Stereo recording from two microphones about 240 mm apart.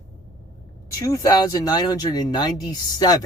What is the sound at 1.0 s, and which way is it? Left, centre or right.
Speech, centre.